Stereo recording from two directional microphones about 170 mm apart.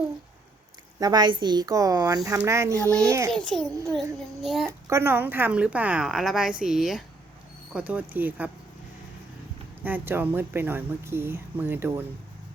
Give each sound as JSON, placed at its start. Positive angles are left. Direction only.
{"t": 0.9, "sound": "speech", "side_deg": -25}
{"t": 3.3, "sound": "a child's voice", "side_deg": 0}
{"t": 4.9, "sound": "speech", "side_deg": -15}
{"t": 9.8, "sound": "speech", "side_deg": -10}